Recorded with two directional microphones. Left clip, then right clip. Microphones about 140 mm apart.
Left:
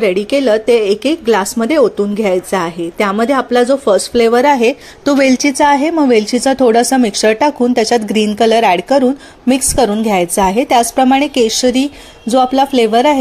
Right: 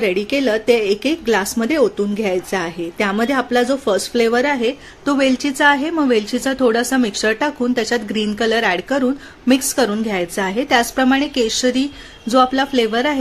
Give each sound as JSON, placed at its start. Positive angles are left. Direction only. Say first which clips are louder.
{"t": 0.0, "sound": "a woman's voice", "louder": "left 5 dB", "side_deg": 5}